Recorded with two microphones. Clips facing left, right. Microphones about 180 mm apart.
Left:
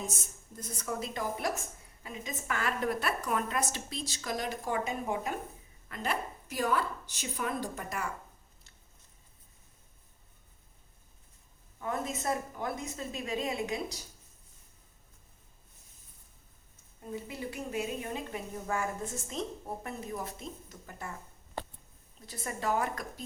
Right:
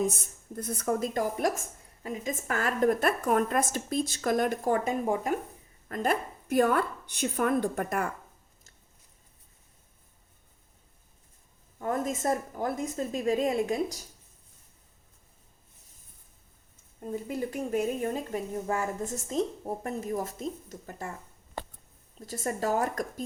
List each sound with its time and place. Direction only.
0.2 s a woman's voice: 60° right (ahead or behind)
11.8 s speech: 45° right (ahead or behind)
17.0 s speech: 45° right (ahead or behind)
22.3 s speech: 40° right (ahead or behind)